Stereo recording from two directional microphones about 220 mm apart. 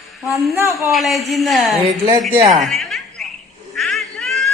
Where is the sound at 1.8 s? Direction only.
15° right (ahead or behind).